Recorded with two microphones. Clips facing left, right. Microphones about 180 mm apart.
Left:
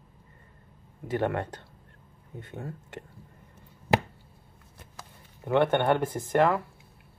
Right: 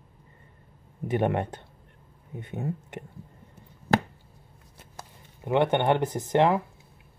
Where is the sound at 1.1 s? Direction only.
20° right (ahead or behind).